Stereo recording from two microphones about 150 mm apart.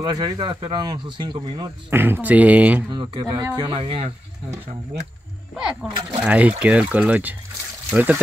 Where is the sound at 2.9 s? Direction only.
30° right (ahead or behind).